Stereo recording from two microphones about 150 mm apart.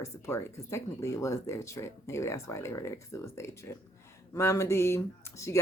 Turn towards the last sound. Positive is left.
turn(degrees=20)  # may be behind; listen again after turning